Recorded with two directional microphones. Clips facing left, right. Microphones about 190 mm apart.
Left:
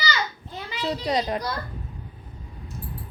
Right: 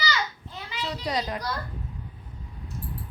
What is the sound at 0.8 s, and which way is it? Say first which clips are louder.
Speech: left 4 dB; 25° left (ahead or behind).